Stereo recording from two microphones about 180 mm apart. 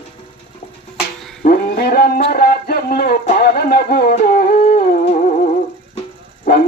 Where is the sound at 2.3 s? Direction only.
60° left (ahead or behind).